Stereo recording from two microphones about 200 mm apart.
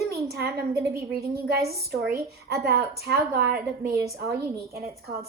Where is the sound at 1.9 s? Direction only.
50° right (ahead or behind).